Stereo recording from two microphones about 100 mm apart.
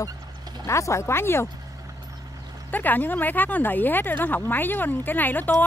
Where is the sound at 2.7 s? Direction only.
15° left (ahead or behind).